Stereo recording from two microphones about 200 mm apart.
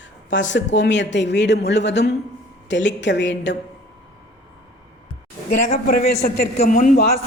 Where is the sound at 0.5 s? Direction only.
60° left (ahead or behind).